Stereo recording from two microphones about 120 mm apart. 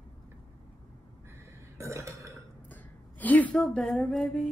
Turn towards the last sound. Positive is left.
turn(degrees=5)  # may be behind; listen again after turning